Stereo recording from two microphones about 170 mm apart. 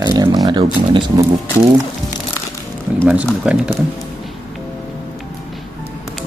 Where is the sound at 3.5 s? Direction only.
5° right (ahead or behind).